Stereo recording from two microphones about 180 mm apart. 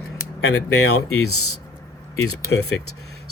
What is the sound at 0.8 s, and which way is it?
Speech, 65° left (ahead or behind).